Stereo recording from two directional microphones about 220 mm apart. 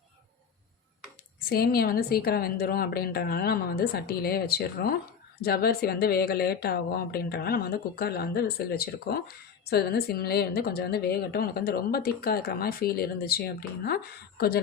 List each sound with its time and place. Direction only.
1.5 s speech: 45° left (ahead or behind)